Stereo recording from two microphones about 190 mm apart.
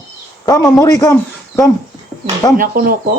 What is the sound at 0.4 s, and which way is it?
Speech, 20° left (ahead or behind).